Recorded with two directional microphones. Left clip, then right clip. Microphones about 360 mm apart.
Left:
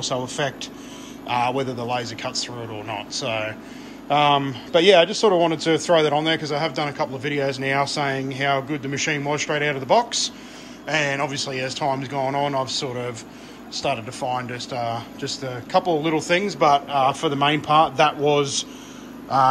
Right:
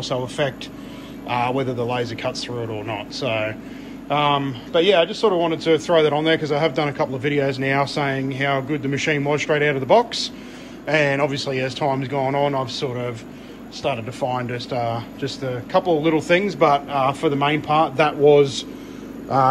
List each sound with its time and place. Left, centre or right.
0.0 s a man's voice: centre